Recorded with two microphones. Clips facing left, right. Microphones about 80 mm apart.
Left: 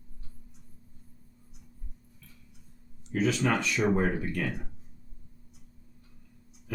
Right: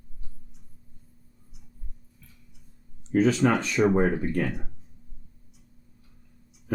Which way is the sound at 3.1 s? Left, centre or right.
Right.